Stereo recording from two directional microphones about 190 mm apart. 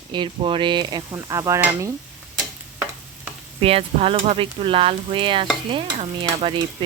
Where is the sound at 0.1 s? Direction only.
25° right (ahead or behind).